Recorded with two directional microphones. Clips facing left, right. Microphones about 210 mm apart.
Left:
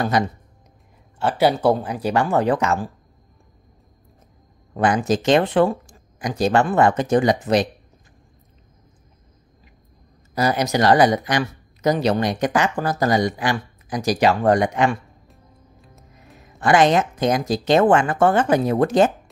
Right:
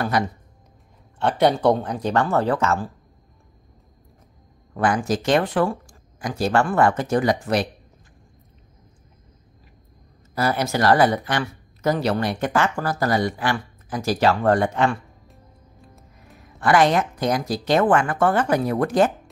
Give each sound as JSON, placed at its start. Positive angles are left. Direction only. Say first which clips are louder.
{"t": 1.2, "sound": "speech", "louder": "even", "side_deg": 5}
{"t": 4.7, "sound": "speech", "louder": "left 2 dB", "side_deg": 20}
{"t": 10.3, "sound": "speech", "louder": "left 2 dB", "side_deg": 15}
{"t": 16.5, "sound": "speech", "louder": "left 2 dB", "side_deg": 20}